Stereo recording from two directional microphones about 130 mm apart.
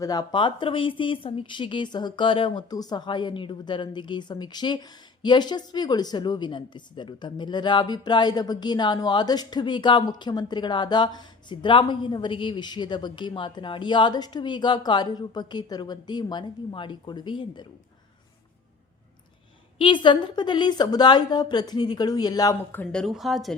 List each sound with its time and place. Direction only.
0.0 s a woman's voice: 30° left (ahead or behind)
19.8 s a woman's voice: 40° left (ahead or behind)
22.7 s speech: 10° left (ahead or behind)